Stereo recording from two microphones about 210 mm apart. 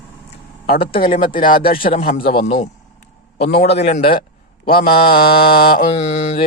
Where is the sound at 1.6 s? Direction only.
45° left (ahead or behind).